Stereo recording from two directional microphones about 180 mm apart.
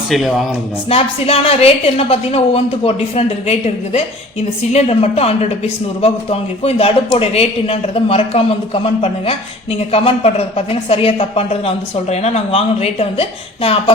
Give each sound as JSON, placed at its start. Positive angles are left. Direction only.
{"t": 0.1, "sound": "speech", "side_deg": 0}
{"t": 0.9, "sound": "a man's voice", "side_deg": 35}